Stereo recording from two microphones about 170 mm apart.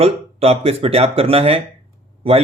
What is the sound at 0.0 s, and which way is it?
Speech, 35° right (ahead or behind).